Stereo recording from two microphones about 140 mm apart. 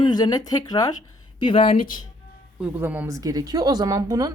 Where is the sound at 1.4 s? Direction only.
40° left (ahead or behind).